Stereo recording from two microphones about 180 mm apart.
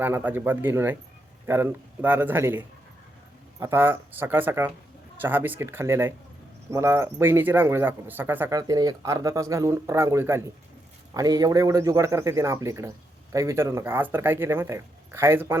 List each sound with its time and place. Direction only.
0.0 s speech: 10° right (ahead or behind)